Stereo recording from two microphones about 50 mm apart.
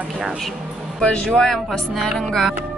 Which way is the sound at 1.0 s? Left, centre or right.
Centre.